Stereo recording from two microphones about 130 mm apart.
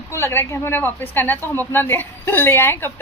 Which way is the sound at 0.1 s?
20° left (ahead or behind).